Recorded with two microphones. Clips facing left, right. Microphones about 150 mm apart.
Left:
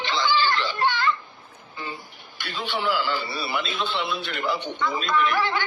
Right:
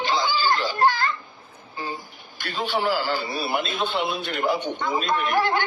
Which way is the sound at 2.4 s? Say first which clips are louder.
Right 3 dB; 45° right (ahead or behind).